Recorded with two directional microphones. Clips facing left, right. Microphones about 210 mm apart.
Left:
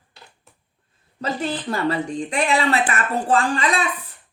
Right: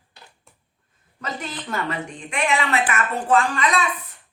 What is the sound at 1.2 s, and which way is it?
A woman's voice, 30° left (ahead or behind).